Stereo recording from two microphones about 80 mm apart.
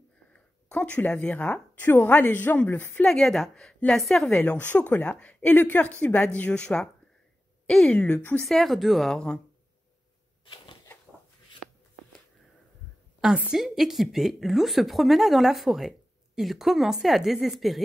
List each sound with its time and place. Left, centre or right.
0.3 s a sound: centre
1.2 s a woman's voice: centre
3.1 s a woman's voice: centre
4.5 s a woman's voice: centre
8.5 s a woman's voice: centre
9.1 s a woman's voice: centre
10.4 s a sound: left
13.6 s a woman's voice: centre